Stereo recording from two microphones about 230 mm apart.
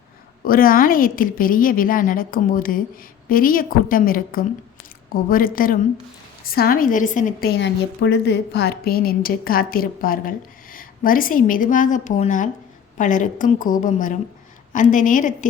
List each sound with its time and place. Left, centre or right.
0.4 s a woman's voice: left
7.6 s a woman's voice: left